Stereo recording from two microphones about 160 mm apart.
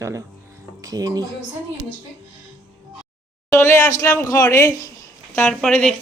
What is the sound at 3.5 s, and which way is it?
Speech, 15° left (ahead or behind).